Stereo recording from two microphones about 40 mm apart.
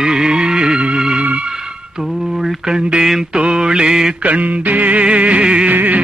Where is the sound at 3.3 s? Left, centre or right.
Right.